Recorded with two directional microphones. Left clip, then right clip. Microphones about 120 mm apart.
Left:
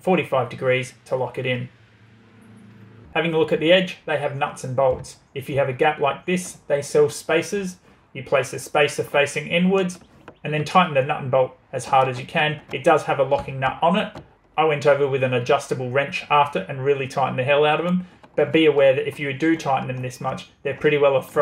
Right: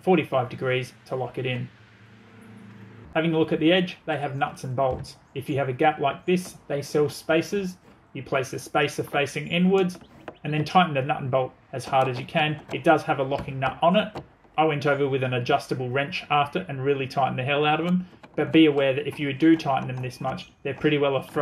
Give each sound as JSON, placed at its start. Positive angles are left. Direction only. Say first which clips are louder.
{"t": 0.0, "sound": "speech", "louder": "left 2 dB", "side_deg": -25}
{"t": 3.1, "sound": "speech", "louder": "left 3 dB", "side_deg": -20}
{"t": 14.5, "sound": "a sound", "louder": "left 3 dB", "side_deg": -30}
{"t": 14.8, "sound": "speech", "louder": "left 6 dB", "side_deg": -30}